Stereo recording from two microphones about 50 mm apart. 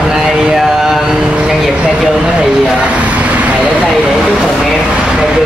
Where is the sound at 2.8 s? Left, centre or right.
Right.